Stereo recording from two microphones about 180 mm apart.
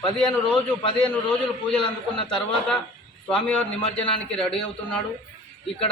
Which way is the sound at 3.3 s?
5° left (ahead or behind).